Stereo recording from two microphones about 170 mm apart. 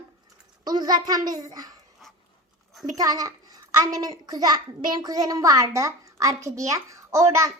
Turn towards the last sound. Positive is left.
turn(degrees=-20)  # may be behind; listen again after turning